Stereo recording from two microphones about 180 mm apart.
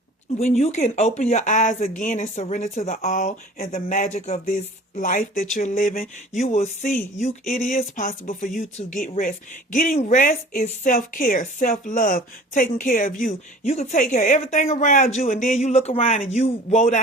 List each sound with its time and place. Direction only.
0.3 s speech: 40° left (ahead or behind)
6.5 s speech: 40° left (ahead or behind)
15.6 s speech: 35° left (ahead or behind)